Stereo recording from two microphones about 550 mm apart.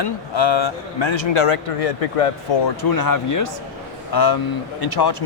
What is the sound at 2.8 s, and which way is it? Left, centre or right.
Speech, left.